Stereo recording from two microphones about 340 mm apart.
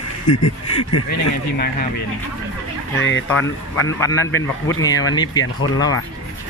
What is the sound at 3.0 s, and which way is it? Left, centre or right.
Speech, left.